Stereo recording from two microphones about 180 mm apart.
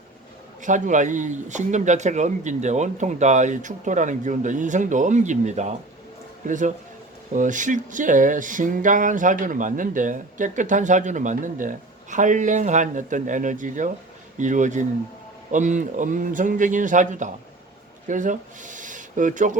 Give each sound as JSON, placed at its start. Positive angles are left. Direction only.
{"t": 0.6, "sound": "speech", "side_deg": -45}